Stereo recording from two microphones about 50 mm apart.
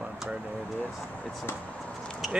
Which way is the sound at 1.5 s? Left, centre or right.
Left.